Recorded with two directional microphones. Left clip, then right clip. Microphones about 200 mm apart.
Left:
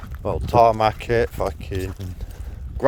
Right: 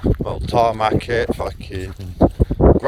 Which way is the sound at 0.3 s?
60° left (ahead or behind).